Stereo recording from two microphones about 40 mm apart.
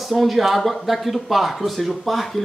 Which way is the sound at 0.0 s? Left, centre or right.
Centre.